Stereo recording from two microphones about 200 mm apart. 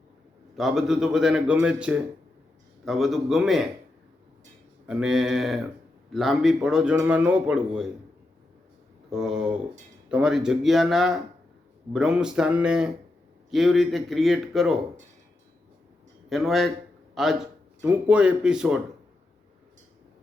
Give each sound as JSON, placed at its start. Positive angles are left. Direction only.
{"t": 0.5, "sound": "a man's voice", "side_deg": 0}
{"t": 4.9, "sound": "a man's voice", "side_deg": -5}
{"t": 9.0, "sound": "a man's voice", "side_deg": 0}
{"t": 16.3, "sound": "a man's voice", "side_deg": 0}